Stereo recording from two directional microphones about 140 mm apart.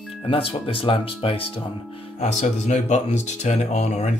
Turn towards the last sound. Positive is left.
turn(degrees=50)  # may be behind; listen again after turning